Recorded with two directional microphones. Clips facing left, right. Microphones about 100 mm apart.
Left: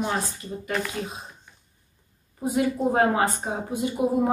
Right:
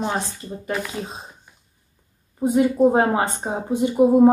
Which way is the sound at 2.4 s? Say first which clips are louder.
Right 7 dB; 25° right (ahead or behind).